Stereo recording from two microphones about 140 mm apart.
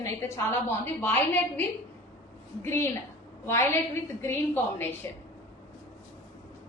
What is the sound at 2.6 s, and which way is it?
A woman's voice, 20° left (ahead or behind).